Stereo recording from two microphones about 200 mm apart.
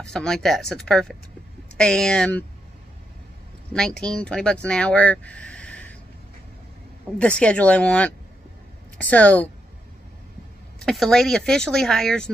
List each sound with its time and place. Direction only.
0.0 s speech: 5° left (ahead or behind)
3.7 s speech: 5° left (ahead or behind)
7.2 s speech: 5° left (ahead or behind)
10.9 s speech: centre (ahead or behind)